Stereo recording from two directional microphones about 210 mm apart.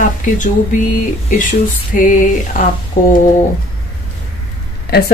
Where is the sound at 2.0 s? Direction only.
40° left (ahead or behind).